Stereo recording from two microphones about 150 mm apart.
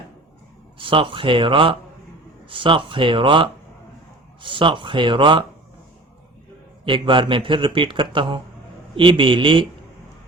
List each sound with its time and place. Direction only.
0.8 s speech: 35° right (ahead or behind)
6.8 s speech: 35° right (ahead or behind)